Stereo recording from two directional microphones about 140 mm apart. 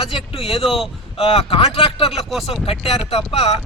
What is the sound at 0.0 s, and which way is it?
Speech, 40° left (ahead or behind).